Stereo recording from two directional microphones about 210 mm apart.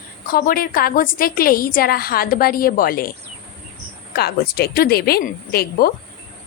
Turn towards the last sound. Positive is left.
turn(degrees=45)  # may be behind; listen again after turning